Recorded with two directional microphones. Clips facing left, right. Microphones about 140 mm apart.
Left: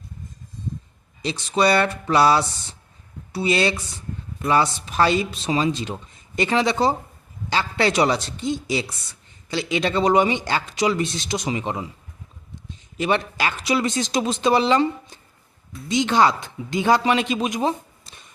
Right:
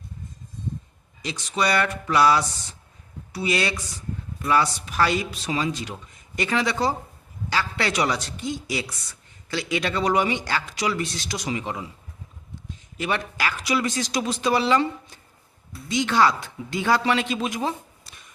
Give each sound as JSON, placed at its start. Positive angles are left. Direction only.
{"t": 1.2, "sound": "speech", "side_deg": 30}
{"t": 13.0, "sound": "speech", "side_deg": 25}